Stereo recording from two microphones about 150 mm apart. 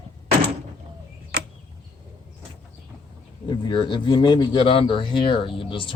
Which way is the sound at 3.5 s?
30° left (ahead or behind).